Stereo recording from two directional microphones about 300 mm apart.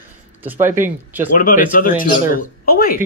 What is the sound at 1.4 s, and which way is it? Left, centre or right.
Speech, left.